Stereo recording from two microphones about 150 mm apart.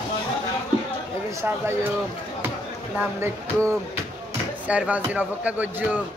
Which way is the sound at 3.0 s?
15° right (ahead or behind).